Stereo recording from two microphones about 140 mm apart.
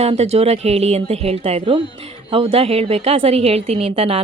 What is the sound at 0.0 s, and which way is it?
A woman's voice, 45° right (ahead or behind).